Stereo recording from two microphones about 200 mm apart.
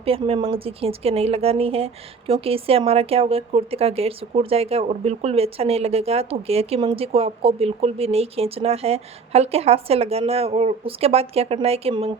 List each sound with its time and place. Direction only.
0.0 s a woman's voice: 30° right (ahead or behind)